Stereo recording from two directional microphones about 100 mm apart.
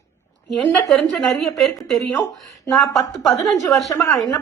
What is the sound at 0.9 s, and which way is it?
A woman's voice, centre (ahead or behind).